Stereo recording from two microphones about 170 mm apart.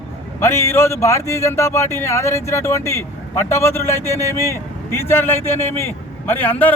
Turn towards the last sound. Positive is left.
turn(degrees=10)  # may be behind; listen again after turning